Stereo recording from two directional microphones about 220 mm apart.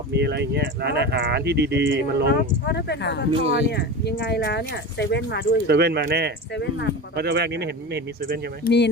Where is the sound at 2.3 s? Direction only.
50° left (ahead or behind).